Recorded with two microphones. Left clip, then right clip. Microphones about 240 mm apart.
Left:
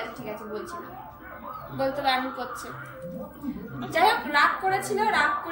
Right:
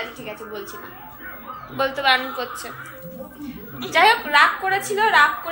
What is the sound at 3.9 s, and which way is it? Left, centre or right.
A woman's voice, centre.